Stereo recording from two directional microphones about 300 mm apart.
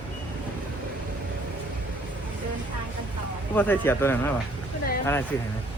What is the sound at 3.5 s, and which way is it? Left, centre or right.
Speech, centre.